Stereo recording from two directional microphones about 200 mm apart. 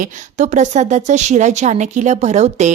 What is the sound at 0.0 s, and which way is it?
Speech, 35° right (ahead or behind).